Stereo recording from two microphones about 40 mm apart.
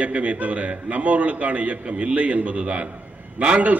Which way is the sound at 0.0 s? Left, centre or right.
Right.